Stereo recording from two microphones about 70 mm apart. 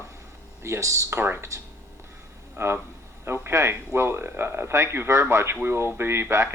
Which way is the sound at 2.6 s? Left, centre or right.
Right.